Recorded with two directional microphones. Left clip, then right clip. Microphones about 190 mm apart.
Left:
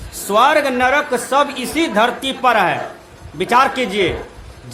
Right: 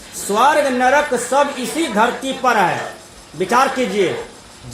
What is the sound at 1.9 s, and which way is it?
Speech, 30° left (ahead or behind).